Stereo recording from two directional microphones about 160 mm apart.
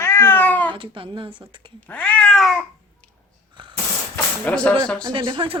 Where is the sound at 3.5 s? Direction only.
30° right (ahead or behind).